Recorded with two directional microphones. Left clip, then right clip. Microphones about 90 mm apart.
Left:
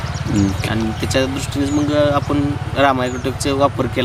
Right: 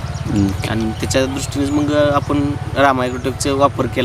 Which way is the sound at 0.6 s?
15° right (ahead or behind).